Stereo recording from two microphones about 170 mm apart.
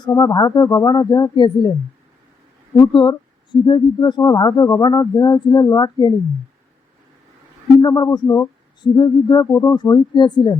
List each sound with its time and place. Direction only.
0.0 s speech: 20° left (ahead or behind)
2.7 s speech: 25° left (ahead or behind)
7.8 s speech: 25° left (ahead or behind)